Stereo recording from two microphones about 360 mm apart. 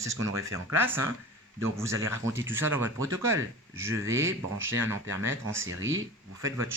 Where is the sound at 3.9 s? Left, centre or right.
Right.